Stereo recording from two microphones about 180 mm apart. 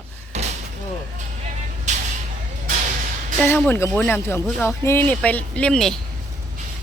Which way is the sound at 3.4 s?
10° left (ahead or behind).